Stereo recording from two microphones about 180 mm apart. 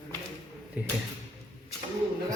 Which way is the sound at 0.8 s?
10° right (ahead or behind).